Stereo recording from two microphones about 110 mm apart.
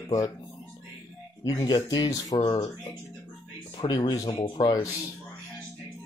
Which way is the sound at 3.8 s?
45° left (ahead or behind).